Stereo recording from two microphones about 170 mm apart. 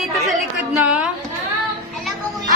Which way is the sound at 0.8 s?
10° right (ahead or behind).